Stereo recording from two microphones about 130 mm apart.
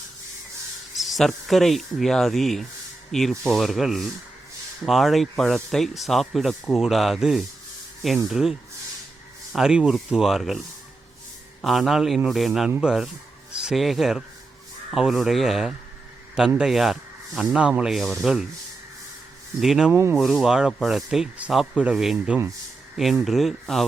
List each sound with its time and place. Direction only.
0.9 s speech: centre (ahead or behind)
11.6 s speech: centre (ahead or behind)
19.5 s speech: 5° right (ahead or behind)
19.9 s speech: 20° right (ahead or behind)
20.1 s speech: centre (ahead or behind)